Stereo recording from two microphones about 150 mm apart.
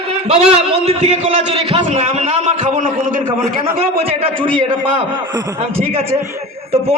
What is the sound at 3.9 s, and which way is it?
A man's voice, 40° right (ahead or behind).